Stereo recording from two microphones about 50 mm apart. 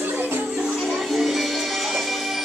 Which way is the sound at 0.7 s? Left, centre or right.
Centre.